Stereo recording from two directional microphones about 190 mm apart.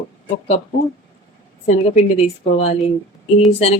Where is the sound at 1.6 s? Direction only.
35° left (ahead or behind).